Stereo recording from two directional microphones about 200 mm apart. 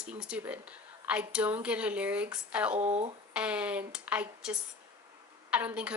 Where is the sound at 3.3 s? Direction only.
5° right (ahead or behind).